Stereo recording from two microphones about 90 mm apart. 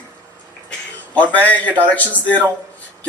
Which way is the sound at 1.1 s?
15° left (ahead or behind).